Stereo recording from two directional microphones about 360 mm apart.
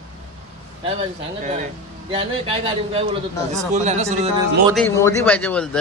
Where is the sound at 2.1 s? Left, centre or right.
Centre.